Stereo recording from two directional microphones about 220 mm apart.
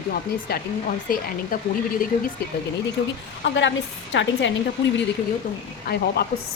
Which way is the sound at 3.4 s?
55° left (ahead or behind).